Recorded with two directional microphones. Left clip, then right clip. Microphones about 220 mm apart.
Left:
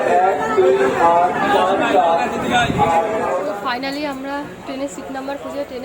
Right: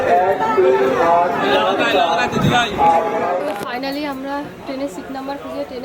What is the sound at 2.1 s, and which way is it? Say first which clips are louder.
Speech: right 1 dB; 35° right (ahead or behind).